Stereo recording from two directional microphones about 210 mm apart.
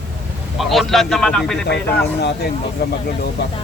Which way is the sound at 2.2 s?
50° left (ahead or behind).